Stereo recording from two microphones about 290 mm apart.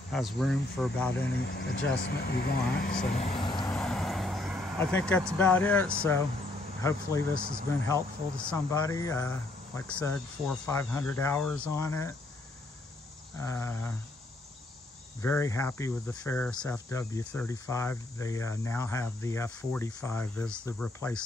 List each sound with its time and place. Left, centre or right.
0.1 s speech: centre
1.3 s speech: left
3.2 s vehicle: centre
3.6 s vehicle: centre
5.4 s speech: centre
13.4 s speech: centre
15.2 s speech: centre